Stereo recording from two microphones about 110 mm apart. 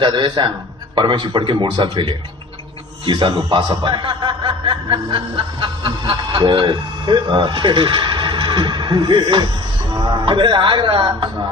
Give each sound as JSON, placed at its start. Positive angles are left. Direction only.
{"t": 0.0, "sound": "a man's voice", "side_deg": -45}